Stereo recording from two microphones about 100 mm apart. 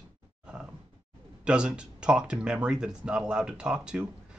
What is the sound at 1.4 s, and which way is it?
Speech, 10° right (ahead or behind).